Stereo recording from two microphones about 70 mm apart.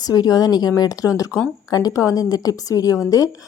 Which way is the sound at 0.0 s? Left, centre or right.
Left.